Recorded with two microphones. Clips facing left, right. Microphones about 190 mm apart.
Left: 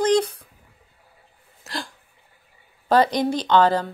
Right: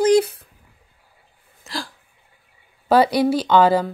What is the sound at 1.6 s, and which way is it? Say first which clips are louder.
Hiccup: right 2 dB; centre (ahead or behind).